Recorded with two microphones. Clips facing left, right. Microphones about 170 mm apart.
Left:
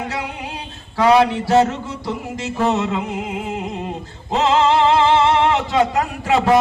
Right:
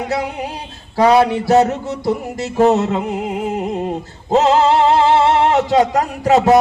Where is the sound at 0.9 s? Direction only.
35° right (ahead or behind).